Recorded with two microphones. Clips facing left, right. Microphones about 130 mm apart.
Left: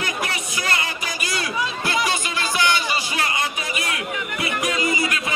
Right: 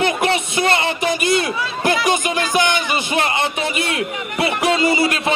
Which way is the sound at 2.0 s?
20° right (ahead or behind).